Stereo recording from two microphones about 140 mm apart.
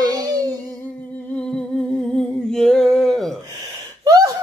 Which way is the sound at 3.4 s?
30° right (ahead or behind).